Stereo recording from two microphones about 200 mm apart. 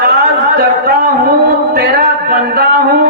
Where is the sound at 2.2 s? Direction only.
50° right (ahead or behind).